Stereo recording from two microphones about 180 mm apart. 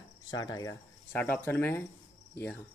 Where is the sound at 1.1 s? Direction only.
10° left (ahead or behind).